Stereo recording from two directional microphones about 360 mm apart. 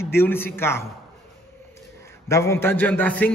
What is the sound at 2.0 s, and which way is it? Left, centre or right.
A man's voice, centre.